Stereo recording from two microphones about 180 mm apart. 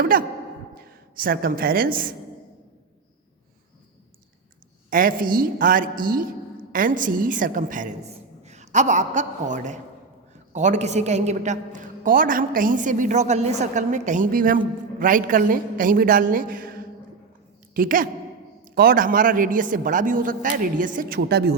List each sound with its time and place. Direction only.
0.0 s a woman's voice: 50° right (ahead or behind)
4.9 s a woman's voice: 50° right (ahead or behind)